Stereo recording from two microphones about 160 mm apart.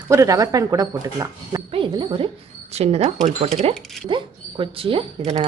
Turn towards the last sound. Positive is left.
turn(degrees=-40)  # may be behind; listen again after turning